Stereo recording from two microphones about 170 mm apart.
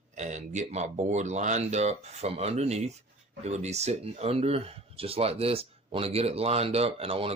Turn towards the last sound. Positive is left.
turn(degrees=-35)  # may be behind; listen again after turning